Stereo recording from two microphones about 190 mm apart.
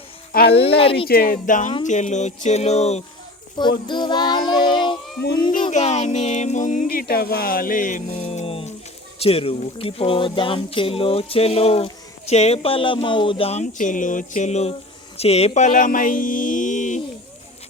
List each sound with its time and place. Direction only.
0.3 s speech: 50° left (ahead or behind)
0.8 s speech: 30° left (ahead or behind)
1.0 s speech: 55° left (ahead or behind); by 3.0 s 35° left (ahead or behind)
3.6 s speech: 25° left (ahead or behind)
5.7 s speech: 35° left (ahead or behind)